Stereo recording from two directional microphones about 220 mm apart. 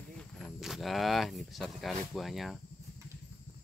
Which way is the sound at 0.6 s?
Centre (ahead or behind).